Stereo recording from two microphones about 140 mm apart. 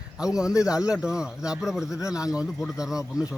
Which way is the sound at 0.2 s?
5° right (ahead or behind).